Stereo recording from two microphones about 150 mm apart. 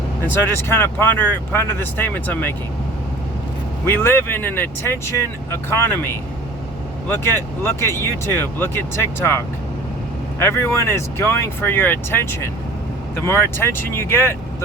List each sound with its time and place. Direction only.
0.5 s speech: 15° left (ahead or behind)
3.8 s speech: 15° left (ahead or behind)
10.4 s speech: 20° left (ahead or behind)